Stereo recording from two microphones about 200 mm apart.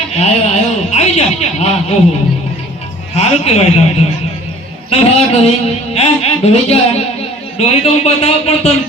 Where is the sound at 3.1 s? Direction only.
30° left (ahead or behind).